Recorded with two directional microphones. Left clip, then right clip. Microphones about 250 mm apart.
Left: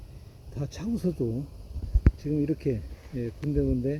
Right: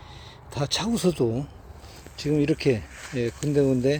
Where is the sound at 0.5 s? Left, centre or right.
Centre.